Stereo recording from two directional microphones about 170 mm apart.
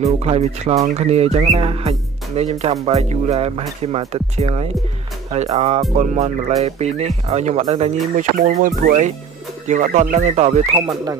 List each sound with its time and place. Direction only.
0.0 s speech: 40° right (ahead or behind)